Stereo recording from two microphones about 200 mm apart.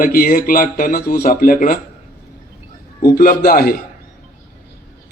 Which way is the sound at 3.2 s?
45° left (ahead or behind).